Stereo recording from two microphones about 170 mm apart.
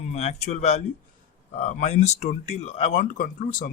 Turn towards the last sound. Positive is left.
turn(degrees=50)  # may be behind; listen again after turning